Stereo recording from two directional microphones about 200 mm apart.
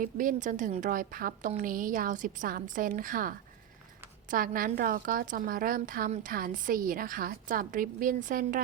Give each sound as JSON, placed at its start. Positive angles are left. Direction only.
{"t": 0.0, "sound": "a woman's voice", "side_deg": -40}